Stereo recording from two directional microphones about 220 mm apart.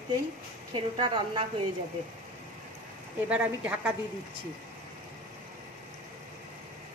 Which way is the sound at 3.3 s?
5° right (ahead or behind).